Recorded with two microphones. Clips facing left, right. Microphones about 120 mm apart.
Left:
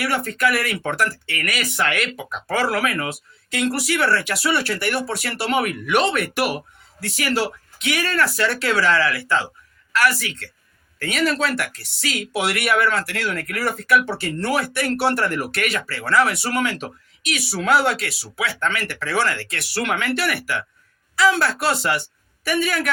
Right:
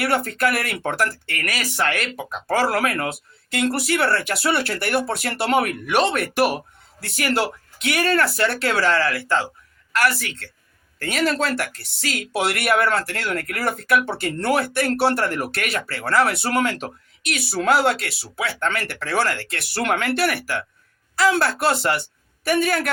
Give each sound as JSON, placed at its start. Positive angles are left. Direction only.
{"t": 0.0, "sound": "speech", "side_deg": -45}